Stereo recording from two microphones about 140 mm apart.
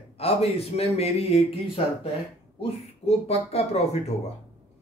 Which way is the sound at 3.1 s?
50° left (ahead or behind).